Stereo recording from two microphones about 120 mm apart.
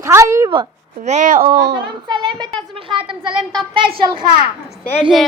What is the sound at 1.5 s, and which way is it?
A child's voice, 35° right (ahead or behind).